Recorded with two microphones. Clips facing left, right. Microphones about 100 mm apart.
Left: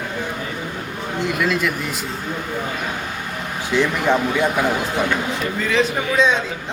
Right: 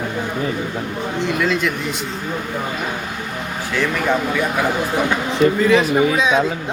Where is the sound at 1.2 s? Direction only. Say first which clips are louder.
Right 1 dB; 5° left (ahead or behind).